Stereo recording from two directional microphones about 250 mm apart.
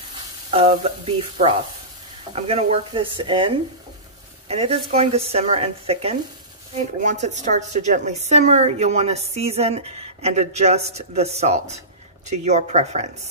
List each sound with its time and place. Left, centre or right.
0.5 s a woman's voice: right